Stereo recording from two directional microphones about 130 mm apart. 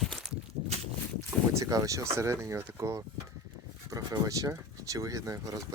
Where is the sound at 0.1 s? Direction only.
Centre (ahead or behind).